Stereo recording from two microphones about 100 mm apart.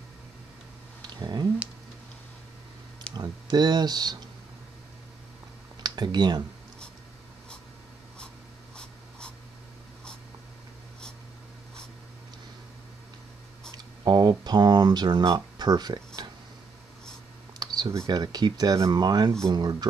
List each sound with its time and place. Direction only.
1.0 s a sound: 45° right (ahead or behind)
3.2 s speech: 45° right (ahead or behind)
5.8 s computer keyboard: 45° right (ahead or behind)
14.0 s speech: 45° right (ahead or behind)
17.6 s computer keyboard: 45° right (ahead or behind)
18.1 s speech: 40° right (ahead or behind)